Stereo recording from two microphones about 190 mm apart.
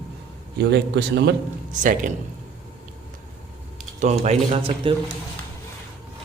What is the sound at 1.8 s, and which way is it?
Speech, 45° right (ahead or behind).